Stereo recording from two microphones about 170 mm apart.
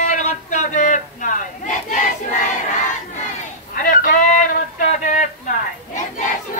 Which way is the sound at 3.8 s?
50° left (ahead or behind).